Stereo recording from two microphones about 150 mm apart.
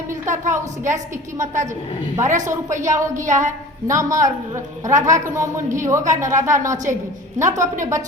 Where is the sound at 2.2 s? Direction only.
55° right (ahead or behind).